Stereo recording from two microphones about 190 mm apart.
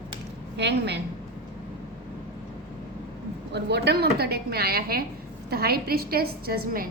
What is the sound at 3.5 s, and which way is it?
A woman's voice, 60° right (ahead or behind).